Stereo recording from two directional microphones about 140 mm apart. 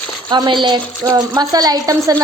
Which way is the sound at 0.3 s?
35° right (ahead or behind).